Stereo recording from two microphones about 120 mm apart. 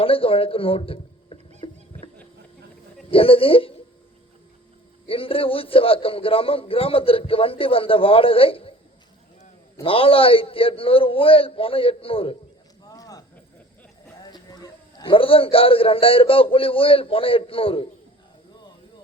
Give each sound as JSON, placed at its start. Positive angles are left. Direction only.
{"t": 0.0, "sound": "speech", "side_deg": 50}
{"t": 3.1, "sound": "a man's voice", "side_deg": 50}
{"t": 5.0, "sound": "a man's voice", "side_deg": 50}
{"t": 9.8, "sound": "a man's voice", "side_deg": 50}
{"t": 12.8, "sound": "cricket", "side_deg": 30}
{"t": 14.2, "sound": "a sound", "side_deg": 35}
{"t": 15.1, "sound": "a man's voice", "side_deg": 50}